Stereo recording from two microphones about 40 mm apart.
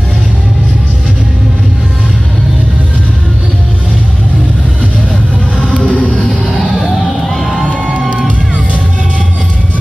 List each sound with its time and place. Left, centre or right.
5.7 s music: right
7.2 s crowd: centre